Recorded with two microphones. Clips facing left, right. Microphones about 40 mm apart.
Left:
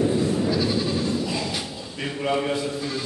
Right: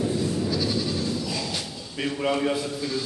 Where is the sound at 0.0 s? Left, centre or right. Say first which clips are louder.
Left 4 dB; centre.